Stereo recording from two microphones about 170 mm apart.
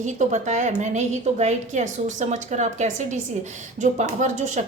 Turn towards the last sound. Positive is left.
turn(degrees=-45)  # may be behind; listen again after turning